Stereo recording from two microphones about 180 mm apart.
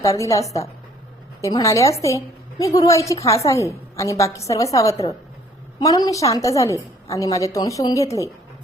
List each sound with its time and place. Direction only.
0.0 s a woman's voice: 15° left (ahead or behind)